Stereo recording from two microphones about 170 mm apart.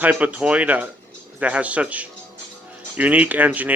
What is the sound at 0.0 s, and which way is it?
Speech, 10° right (ahead or behind).